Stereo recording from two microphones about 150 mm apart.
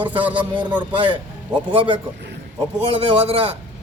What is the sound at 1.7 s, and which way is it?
A man's voice, 35° right (ahead or behind).